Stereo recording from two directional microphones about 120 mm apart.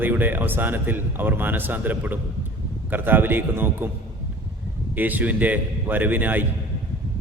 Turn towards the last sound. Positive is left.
turn(degrees=-15)  # may be behind; listen again after turning